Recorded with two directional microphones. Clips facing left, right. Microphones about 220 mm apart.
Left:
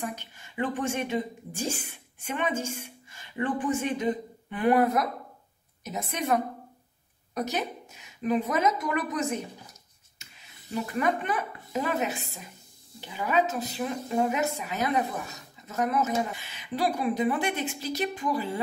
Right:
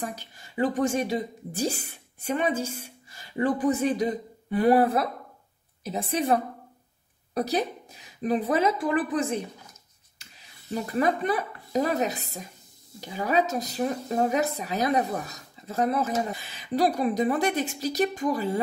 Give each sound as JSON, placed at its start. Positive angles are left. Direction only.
{"t": 0.0, "sound": "a woman's voice", "side_deg": -35}
{"t": 10.7, "sound": "speech", "side_deg": -35}